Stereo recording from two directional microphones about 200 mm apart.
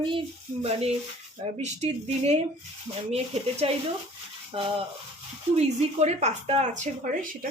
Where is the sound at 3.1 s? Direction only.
30° right (ahead or behind).